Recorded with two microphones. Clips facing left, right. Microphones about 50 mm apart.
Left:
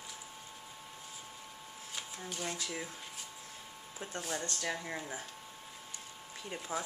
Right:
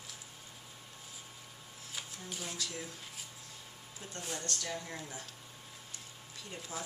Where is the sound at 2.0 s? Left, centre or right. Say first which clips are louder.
Left 2 dB; centre.